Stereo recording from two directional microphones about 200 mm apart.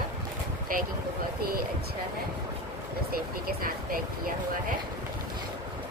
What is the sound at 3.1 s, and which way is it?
Vehicle, 50° right (ahead or behind).